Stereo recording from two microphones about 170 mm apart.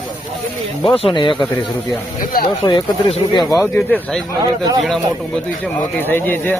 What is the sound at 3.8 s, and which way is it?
Speech, 5° left (ahead or behind).